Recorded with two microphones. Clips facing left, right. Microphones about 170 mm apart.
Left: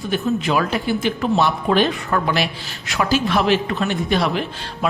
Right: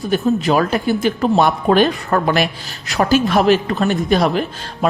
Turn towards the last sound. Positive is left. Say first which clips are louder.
# right 4 dB
turn(degrees=-45)  # may be behind; listen again after turning